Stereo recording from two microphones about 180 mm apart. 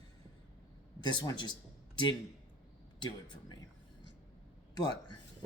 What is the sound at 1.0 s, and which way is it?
Speech, 25° left (ahead or behind).